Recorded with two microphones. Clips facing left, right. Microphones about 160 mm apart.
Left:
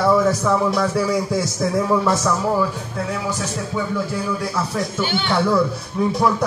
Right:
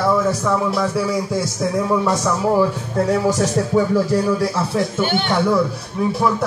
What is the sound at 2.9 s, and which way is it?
Music, 45° right (ahead or behind).